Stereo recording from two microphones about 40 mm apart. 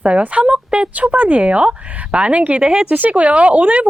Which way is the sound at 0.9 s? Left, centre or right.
Right.